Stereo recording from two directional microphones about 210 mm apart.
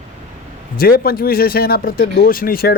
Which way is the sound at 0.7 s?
45° left (ahead or behind).